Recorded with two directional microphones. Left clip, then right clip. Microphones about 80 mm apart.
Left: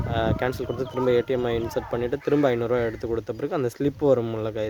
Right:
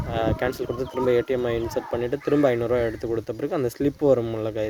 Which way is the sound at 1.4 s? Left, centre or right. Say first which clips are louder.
Even; left.